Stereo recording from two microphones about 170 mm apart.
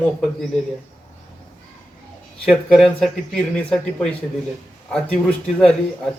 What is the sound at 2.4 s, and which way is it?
A man's voice, 5° left (ahead or behind).